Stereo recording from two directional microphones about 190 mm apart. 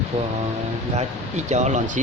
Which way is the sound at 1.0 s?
40° right (ahead or behind).